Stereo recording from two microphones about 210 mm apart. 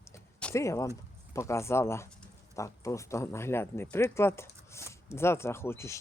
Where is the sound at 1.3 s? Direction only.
15° left (ahead or behind).